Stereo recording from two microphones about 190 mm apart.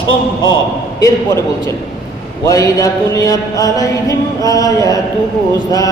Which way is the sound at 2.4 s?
20° left (ahead or behind).